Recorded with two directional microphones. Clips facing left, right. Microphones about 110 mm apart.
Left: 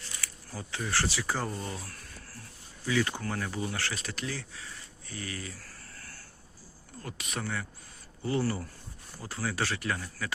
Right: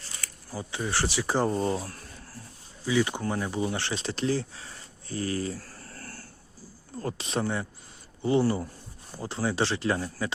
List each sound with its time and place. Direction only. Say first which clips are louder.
0.5 s speech: right 3 dB; 15° right (ahead or behind)
2.8 s speech: right 4 dB; 15° right (ahead or behind); by 6.2 s 40° right (ahead or behind)
7.0 s speech: right 8 dB; 30° right (ahead or behind)